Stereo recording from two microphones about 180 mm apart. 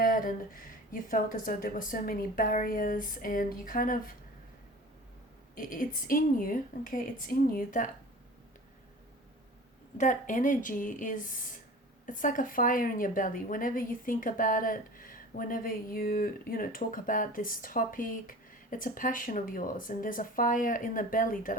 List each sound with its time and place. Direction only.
0.0 s a woman's voice: 50° left (ahead or behind)
5.5 s a woman's voice: 50° left (ahead or behind)
10.0 s a woman's voice: 45° left (ahead or behind)